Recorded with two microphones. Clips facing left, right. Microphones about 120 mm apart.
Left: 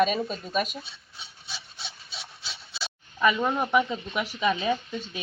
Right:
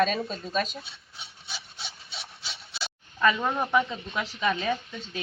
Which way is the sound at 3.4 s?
5° left (ahead or behind).